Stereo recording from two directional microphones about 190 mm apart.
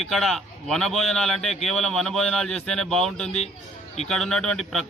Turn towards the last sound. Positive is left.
turn(degrees=0)  # may be behind; listen again after turning